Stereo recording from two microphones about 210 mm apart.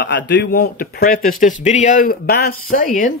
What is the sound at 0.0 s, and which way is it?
Speech, 55° left (ahead or behind).